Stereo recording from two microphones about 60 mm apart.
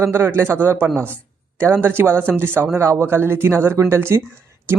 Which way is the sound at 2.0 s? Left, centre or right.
Right.